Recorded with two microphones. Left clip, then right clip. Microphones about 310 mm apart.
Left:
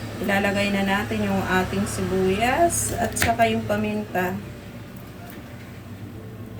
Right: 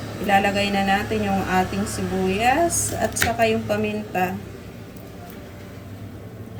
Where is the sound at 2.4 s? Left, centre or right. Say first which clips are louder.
Right 3 dB; centre.